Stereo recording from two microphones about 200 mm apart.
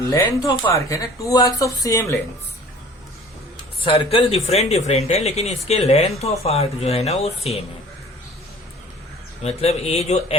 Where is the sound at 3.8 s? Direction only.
25° left (ahead or behind).